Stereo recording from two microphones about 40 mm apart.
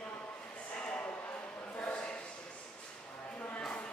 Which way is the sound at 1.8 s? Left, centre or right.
Left.